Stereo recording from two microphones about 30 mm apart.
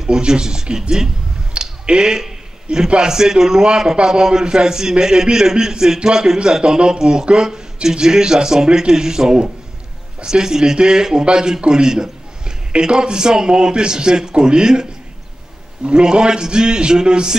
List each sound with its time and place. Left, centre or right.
0.0 s a man's voice: right
1.6 s a sound: right
1.9 s a man's voice: right
3.0 s a man's voice: centre